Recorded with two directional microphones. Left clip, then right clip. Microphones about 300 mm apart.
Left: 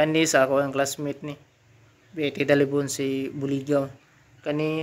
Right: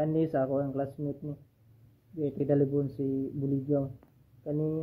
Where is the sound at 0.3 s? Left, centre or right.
Centre.